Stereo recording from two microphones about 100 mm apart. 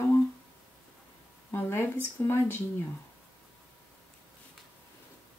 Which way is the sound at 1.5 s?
25° left (ahead or behind).